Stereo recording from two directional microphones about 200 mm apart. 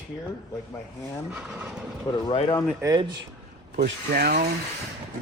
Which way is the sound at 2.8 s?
15° right (ahead or behind).